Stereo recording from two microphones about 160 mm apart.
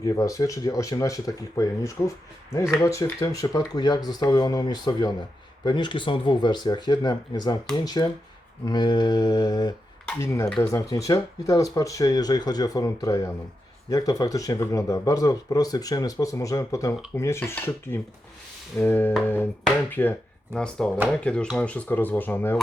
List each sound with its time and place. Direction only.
0.0 s speech: 20° left (ahead or behind)